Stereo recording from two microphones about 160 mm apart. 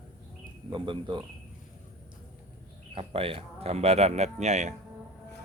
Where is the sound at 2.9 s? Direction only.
35° right (ahead or behind).